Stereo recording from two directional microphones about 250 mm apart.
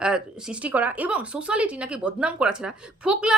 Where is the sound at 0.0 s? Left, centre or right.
Centre.